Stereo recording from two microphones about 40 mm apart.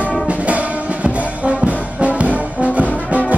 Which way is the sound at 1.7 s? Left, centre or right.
Right.